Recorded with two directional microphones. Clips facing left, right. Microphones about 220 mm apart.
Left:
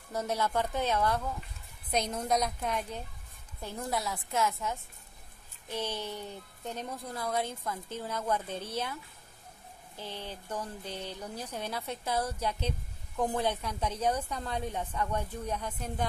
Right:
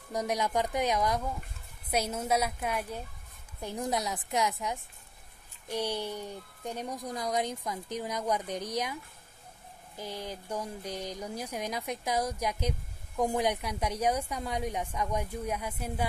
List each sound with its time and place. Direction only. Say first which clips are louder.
0.1 s speech: right 1 dB; 15° right (ahead or behind)